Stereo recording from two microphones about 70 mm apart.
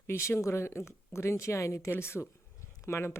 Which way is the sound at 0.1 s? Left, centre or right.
Left.